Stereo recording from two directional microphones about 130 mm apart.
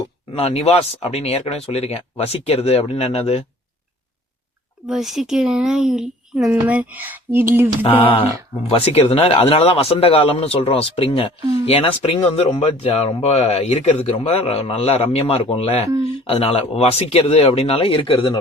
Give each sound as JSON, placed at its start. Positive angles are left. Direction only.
{"t": 0.3, "sound": "speech", "side_deg": 50}
{"t": 4.9, "sound": "a child's voice", "side_deg": -5}
{"t": 8.0, "sound": "speech", "side_deg": 45}